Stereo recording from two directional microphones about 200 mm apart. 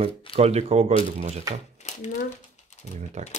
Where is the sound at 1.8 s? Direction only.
35° left (ahead or behind).